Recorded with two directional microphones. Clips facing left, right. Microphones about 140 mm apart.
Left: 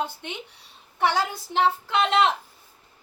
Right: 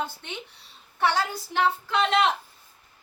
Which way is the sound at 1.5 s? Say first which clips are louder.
Left 2 dB; 20° left (ahead or behind).